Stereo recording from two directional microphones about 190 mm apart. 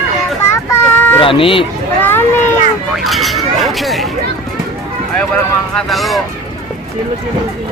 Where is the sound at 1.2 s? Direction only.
30° left (ahead or behind).